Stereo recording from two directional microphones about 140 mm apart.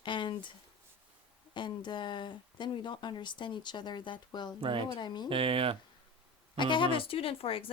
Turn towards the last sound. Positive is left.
turn(degrees=40)  # may be behind; listen again after turning